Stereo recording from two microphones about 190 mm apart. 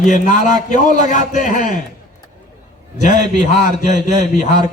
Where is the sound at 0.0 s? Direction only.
40° left (ahead or behind).